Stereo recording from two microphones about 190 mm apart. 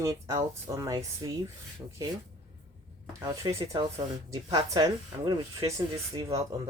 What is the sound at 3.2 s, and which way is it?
Speech, 15° right (ahead or behind).